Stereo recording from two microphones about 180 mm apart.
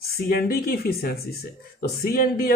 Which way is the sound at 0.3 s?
55° left (ahead or behind).